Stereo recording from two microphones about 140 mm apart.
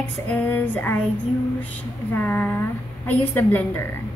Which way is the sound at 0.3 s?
10° left (ahead or behind).